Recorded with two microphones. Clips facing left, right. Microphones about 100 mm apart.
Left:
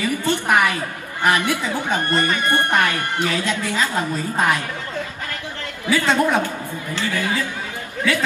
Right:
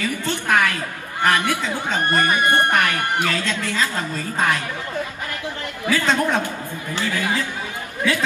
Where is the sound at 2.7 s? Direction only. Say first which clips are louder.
Even; 15° left (ahead or behind).